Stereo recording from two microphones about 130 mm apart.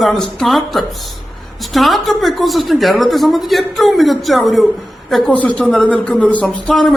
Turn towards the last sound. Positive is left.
turn(degrees=0)  # may be behind; listen again after turning